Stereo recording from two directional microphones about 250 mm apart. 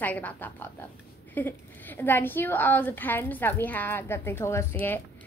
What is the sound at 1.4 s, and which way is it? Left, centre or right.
A woman's voice, centre.